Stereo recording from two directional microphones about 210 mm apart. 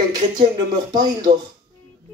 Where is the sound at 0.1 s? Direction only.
20° right (ahead or behind).